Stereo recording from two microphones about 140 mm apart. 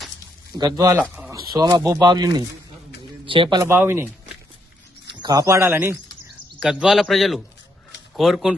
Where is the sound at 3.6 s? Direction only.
15° right (ahead or behind).